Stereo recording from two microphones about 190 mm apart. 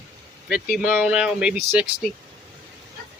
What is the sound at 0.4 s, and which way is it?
Speech, 5° right (ahead or behind).